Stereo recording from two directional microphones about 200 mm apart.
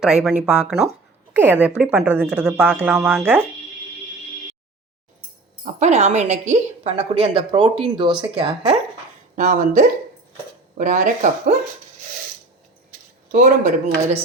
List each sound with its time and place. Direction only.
0.0 s speech: 5° right (ahead or behind)
5.6 s a woman's voice: 35° right (ahead or behind)
9.3 s a woman's voice: 40° right (ahead or behind)
13.3 s a woman's voice: 40° right (ahead or behind)